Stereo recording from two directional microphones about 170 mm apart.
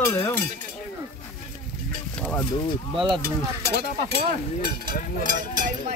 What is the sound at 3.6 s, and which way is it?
Speech, 70° right (ahead or behind).